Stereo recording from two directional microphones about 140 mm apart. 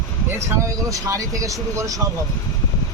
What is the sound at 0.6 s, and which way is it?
Speech, 25° right (ahead or behind).